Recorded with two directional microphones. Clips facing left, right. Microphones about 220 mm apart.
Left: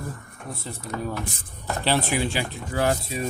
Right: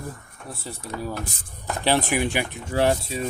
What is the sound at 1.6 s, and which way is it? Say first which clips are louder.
Speech: right 2 dB; 15° right (ahead or behind).